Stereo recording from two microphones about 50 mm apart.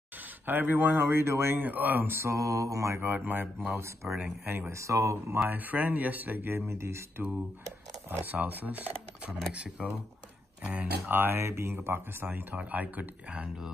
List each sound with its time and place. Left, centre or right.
0.5 s speech: right
1.6 s speech: right
2.0 s mantra: right
3.0 s speech: right
3.7 s speech: right
4.2 s speech: right
4.6 s speech: right
5.5 s speech: right
6.5 s speech: right
8.1 s speech: right
11.1 s speech: right
11.3 s speech: right